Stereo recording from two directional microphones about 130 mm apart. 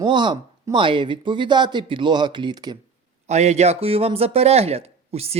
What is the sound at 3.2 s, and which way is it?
Speech, 60° right (ahead or behind).